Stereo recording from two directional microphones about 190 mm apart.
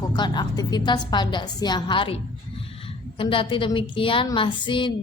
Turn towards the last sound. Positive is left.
turn(degrees=25)  # may be behind; listen again after turning